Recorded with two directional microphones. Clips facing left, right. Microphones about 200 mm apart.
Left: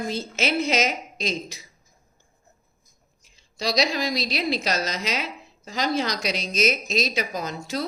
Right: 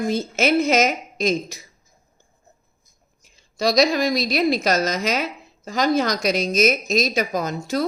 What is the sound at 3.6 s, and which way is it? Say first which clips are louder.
A woman's voice: right 6 dB; 50° right (ahead or behind).